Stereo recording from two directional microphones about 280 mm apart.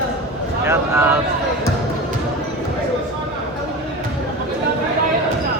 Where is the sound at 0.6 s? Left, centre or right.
Centre.